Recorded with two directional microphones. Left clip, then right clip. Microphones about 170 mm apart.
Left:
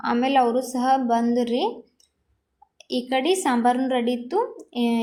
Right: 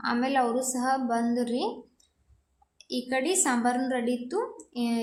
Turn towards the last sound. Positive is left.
turn(degrees=20)  # may be behind; listen again after turning